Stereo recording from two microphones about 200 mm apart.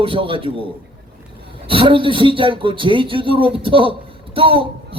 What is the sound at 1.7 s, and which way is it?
A man's voice, 25° right (ahead or behind).